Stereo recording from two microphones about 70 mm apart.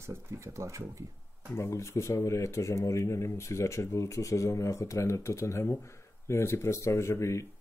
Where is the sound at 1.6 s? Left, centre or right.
Left.